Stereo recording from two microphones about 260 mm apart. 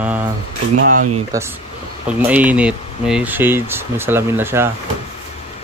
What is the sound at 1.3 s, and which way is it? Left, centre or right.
Speech, centre.